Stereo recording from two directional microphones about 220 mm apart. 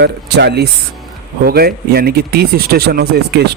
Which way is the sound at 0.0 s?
50° right (ahead or behind).